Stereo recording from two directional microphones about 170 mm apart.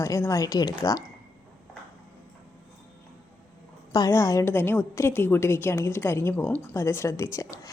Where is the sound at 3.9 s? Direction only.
20° left (ahead or behind).